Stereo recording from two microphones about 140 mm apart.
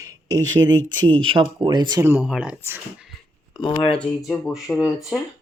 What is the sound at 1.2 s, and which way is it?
Speech, 40° right (ahead or behind).